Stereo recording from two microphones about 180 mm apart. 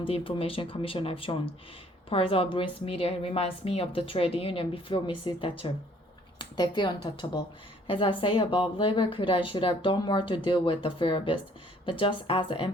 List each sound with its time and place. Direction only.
0.0 s a woman's voice: 30° left (ahead or behind)